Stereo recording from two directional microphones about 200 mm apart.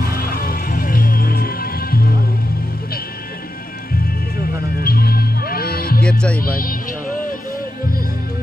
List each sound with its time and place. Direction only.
0.1 s music: 45° left (ahead or behind)
4.8 s music: 50° left (ahead or behind)
6.0 s music: 5° left (ahead or behind)
6.4 s music: 45° left (ahead or behind)